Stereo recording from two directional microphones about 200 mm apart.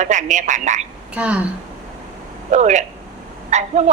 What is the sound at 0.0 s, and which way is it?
Speech, 40° right (ahead or behind).